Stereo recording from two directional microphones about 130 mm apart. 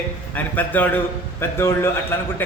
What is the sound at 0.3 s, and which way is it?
A man's voice, 15° left (ahead or behind).